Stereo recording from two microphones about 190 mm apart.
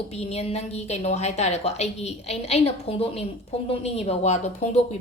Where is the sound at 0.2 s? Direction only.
35° left (ahead or behind).